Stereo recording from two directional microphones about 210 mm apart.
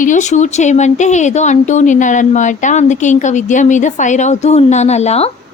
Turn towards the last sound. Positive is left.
turn(degrees=30)  # may be behind; listen again after turning